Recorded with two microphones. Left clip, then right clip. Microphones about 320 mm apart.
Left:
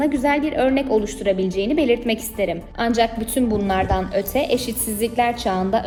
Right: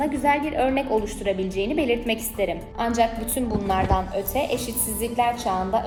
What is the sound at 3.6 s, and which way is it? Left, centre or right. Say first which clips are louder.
Speech: right 1 dB; left.